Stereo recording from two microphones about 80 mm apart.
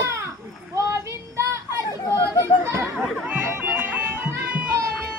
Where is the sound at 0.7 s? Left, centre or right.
Right.